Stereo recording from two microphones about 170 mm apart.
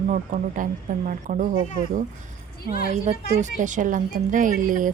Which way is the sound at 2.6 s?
65° left (ahead or behind).